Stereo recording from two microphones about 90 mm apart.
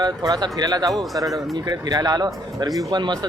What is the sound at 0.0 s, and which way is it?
Speech, 45° right (ahead or behind).